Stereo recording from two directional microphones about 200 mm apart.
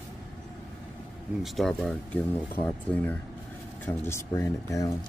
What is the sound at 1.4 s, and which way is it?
Speech, centre (ahead or behind).